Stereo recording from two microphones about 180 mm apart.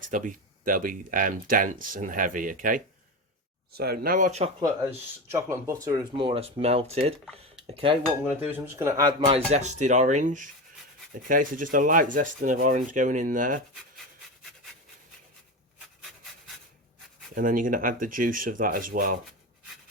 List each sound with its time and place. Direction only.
0.1 s speech: 45° right (ahead or behind)
4.6 s speech: 15° right (ahead or behind)
6.1 s speech: 30° right (ahead or behind)
8.4 s speech: 10° right (ahead or behind)
9.5 s speech: 40° right (ahead or behind)
17.3 s speech: 50° right (ahead or behind)